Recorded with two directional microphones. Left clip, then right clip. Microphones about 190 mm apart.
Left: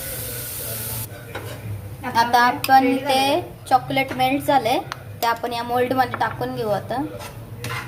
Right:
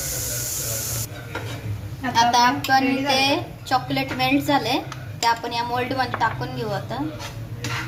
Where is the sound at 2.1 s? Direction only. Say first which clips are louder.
Even; 25° left (ahead or behind).